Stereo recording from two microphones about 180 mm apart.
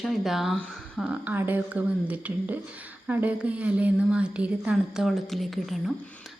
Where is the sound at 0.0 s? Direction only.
Centre (ahead or behind).